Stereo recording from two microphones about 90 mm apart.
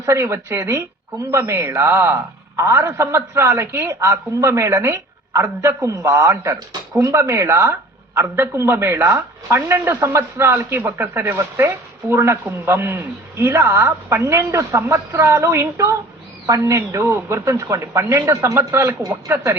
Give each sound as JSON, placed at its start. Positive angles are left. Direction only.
{"t": 0.0, "sound": "a man's voice", "side_deg": -35}
{"t": 18.5, "sound": "a man's voice", "side_deg": -25}